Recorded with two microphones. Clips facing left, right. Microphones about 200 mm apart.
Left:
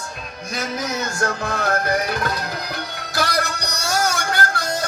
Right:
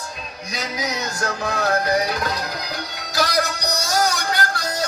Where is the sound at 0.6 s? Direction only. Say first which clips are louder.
Left 1 dB; 55° left (ahead or behind).